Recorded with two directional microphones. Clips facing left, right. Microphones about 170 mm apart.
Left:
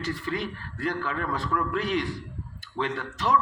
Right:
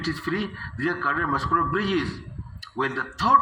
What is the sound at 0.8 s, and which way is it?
Speech, 20° left (ahead or behind).